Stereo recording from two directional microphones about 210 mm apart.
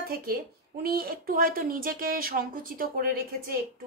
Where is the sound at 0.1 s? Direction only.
45° right (ahead or behind).